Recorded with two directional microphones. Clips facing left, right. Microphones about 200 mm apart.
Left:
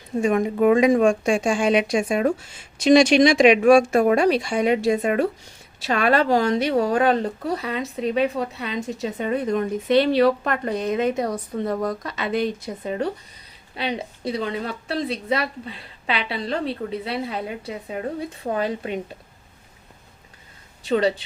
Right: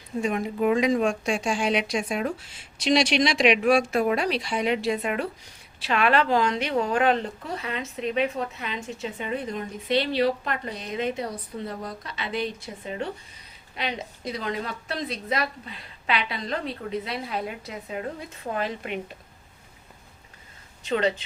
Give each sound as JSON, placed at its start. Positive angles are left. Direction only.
{"t": 0.2, "sound": "speech", "side_deg": 50}
{"t": 20.8, "sound": "speech", "side_deg": 35}